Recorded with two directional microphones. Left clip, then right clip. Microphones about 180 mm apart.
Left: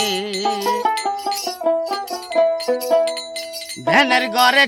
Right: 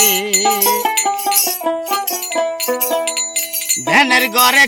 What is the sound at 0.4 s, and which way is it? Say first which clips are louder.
Music: right 2 dB; 30° right (ahead or behind).